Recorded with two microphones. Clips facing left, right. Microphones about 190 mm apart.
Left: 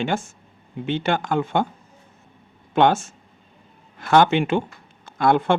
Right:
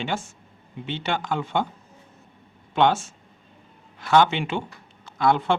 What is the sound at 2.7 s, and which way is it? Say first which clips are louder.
Speech: left 3 dB; 50° left (ahead or behind).